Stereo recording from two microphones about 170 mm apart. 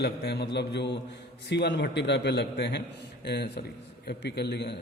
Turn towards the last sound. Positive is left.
turn(degrees=75)  # may be behind; listen again after turning